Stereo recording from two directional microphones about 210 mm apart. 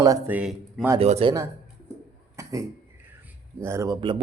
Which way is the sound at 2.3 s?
15° right (ahead or behind).